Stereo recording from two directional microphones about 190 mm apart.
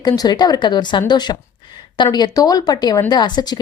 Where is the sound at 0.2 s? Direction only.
20° left (ahead or behind).